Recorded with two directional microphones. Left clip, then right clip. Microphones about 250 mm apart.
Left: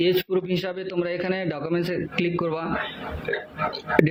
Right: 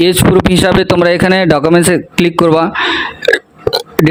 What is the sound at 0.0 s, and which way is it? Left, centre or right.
Speech, right.